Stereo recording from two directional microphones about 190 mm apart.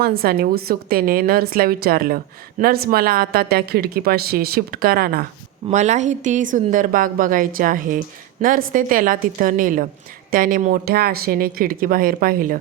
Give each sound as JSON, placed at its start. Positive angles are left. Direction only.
{"t": 0.0, "sound": "a woman's voice", "side_deg": -50}
{"t": 5.6, "sound": "a woman's voice", "side_deg": -40}